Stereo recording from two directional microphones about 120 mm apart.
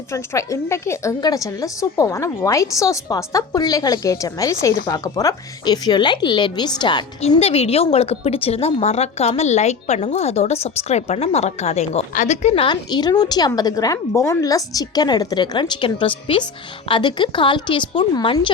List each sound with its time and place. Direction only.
0.1 s a woman's voice: 25° left (ahead or behind)
7.2 s a woman's voice: 60° left (ahead or behind)
12.5 s a woman's voice: 40° left (ahead or behind)